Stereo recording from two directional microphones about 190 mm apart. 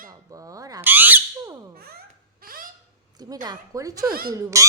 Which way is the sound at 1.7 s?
55° right (ahead or behind).